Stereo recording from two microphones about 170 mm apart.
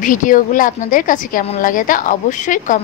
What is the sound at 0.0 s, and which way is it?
Speech, 50° left (ahead or behind).